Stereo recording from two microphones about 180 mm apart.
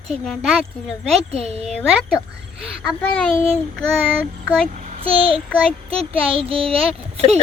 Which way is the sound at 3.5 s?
5° left (ahead or behind).